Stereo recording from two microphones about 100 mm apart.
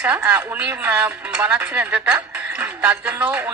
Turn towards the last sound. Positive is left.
turn(degrees=-15)  # may be behind; listen again after turning